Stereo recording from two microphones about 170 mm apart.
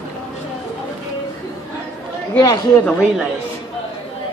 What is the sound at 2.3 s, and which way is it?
Speech, 25° left (ahead or behind).